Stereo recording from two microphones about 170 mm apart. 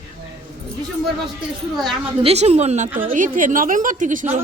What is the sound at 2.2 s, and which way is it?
A woman's voice, 35° right (ahead or behind).